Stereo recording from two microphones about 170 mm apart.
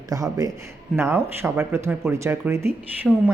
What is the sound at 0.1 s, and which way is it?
Speech, 20° right (ahead or behind).